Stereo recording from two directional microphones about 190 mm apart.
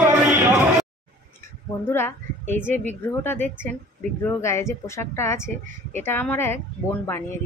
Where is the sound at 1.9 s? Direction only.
10° left (ahead or behind).